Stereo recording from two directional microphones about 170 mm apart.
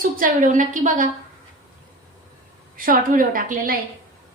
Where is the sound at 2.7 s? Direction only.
55° right (ahead or behind).